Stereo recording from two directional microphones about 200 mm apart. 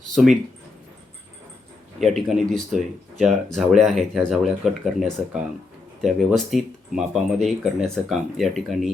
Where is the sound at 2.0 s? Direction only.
Centre (ahead or behind).